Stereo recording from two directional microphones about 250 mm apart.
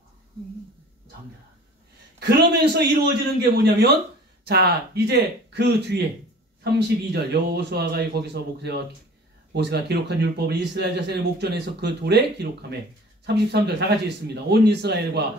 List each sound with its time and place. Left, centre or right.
2.1 s speech: right